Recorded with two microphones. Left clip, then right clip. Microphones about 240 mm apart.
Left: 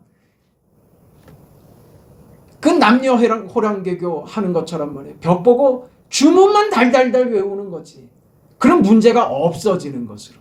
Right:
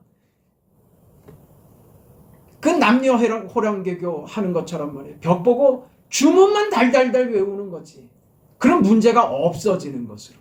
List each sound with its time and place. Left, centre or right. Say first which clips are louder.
2.6 s speech: left 4 dB; centre